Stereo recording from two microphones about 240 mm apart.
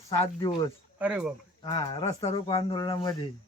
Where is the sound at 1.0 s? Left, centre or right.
Centre.